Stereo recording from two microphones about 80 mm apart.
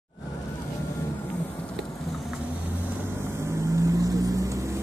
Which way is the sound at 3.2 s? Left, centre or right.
Right.